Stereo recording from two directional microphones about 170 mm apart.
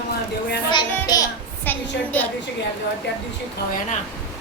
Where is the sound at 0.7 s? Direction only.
25° left (ahead or behind).